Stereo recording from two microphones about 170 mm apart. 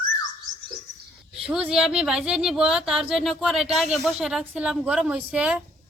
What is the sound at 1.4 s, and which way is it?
Speech, 5° right (ahead or behind).